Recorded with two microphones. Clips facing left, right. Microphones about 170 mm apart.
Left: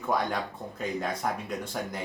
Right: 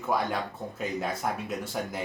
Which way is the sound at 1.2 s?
5° right (ahead or behind).